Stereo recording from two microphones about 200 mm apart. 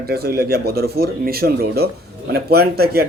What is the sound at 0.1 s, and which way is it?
Speech, 50° right (ahead or behind).